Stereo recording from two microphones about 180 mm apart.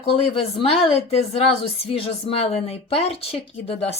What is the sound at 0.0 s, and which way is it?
Speech, 30° left (ahead or behind).